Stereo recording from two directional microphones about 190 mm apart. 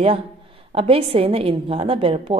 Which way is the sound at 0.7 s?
30° right (ahead or behind).